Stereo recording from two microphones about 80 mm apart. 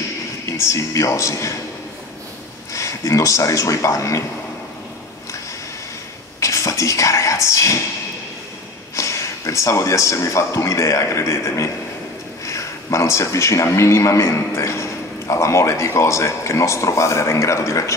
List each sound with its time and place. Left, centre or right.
0.5 s a man's voice: left
2.7 s speech: left
6.4 s speech: left
8.9 s a man's voice: left